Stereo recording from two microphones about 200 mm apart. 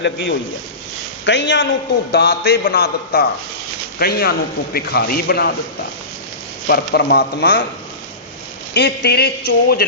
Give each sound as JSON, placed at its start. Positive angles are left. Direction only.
{"t": 0.0, "sound": "a man's voice", "side_deg": 60}
{"t": 6.7, "sound": "a man's voice", "side_deg": 55}
{"t": 8.7, "sound": "a man's voice", "side_deg": 55}